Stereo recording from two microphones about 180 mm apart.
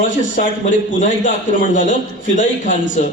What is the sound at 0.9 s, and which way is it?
A man's voice, 45° left (ahead or behind).